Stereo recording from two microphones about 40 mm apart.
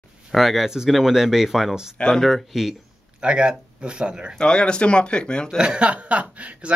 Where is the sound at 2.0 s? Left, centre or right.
Left.